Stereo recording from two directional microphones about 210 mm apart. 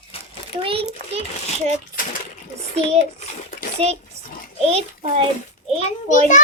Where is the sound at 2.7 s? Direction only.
30° right (ahead or behind).